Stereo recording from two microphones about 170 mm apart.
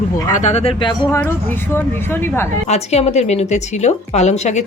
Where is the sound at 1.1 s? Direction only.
10° left (ahead or behind).